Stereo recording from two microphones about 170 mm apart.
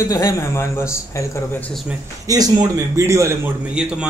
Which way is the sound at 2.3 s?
20° right (ahead or behind).